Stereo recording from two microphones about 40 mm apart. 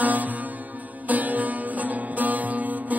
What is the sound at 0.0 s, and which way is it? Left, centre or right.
Music, right.